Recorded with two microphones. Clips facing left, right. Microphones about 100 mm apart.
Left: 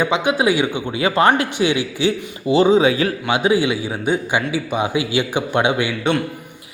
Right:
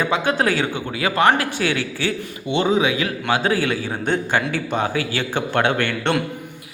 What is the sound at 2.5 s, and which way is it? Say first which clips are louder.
Speech: left 5 dB; 30° left (ahead or behind).